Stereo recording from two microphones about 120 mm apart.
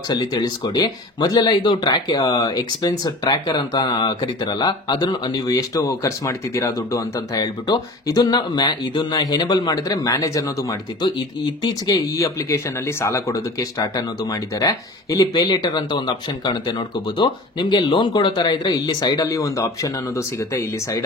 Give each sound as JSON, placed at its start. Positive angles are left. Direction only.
{"t": 0.1, "sound": "speech", "side_deg": 35}